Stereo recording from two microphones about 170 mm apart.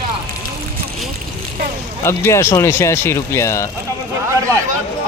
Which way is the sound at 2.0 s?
15° left (ahead or behind).